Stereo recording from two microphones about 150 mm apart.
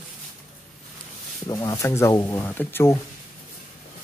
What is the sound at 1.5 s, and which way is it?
Speech, 25° left (ahead or behind).